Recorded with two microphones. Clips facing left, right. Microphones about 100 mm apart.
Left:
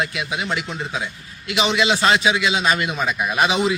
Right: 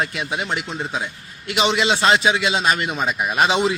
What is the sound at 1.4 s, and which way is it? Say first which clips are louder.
A man's voice: even; 35° right (ahead or behind).